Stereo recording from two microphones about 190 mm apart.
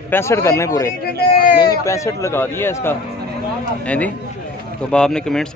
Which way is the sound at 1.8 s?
15° left (ahead or behind).